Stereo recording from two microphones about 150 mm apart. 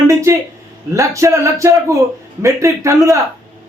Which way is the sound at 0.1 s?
20° right (ahead or behind).